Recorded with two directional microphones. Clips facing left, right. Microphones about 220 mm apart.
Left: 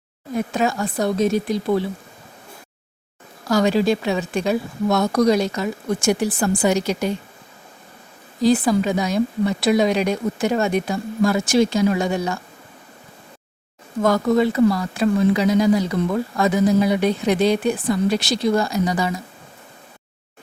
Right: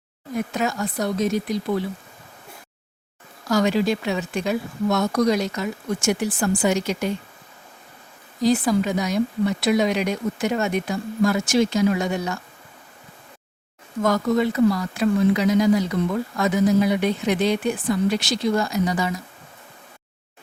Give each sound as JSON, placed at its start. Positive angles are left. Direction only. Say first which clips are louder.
{"t": 0.3, "sound": "speech", "louder": "left 3 dB", "side_deg": 30}
{"t": 3.5, "sound": "speech", "louder": "left 3 dB", "side_deg": 30}
{"t": 8.4, "sound": "speech", "louder": "left 2 dB", "side_deg": 30}
{"t": 14.0, "sound": "speech", "louder": "left 3 dB", "side_deg": 30}